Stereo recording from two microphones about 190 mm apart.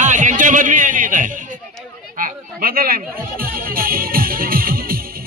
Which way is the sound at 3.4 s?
50° right (ahead or behind).